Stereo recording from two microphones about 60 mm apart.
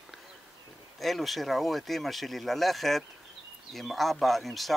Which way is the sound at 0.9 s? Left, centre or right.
Centre.